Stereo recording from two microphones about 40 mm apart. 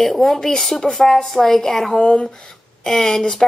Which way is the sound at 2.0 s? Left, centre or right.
Left.